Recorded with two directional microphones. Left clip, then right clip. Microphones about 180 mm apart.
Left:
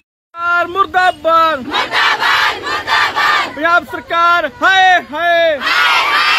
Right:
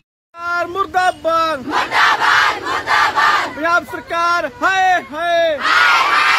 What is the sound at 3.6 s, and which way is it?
A man's voice, 35° left (ahead or behind).